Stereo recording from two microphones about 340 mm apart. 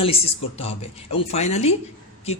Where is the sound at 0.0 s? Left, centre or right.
Centre.